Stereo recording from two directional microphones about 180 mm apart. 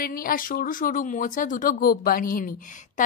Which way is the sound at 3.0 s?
45° left (ahead or behind).